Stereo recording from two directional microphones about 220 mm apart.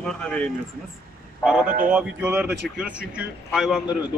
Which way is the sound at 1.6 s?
35° right (ahead or behind).